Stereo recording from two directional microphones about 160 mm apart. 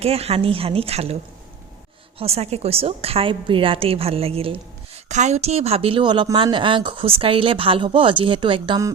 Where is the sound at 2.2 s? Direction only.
40° right (ahead or behind).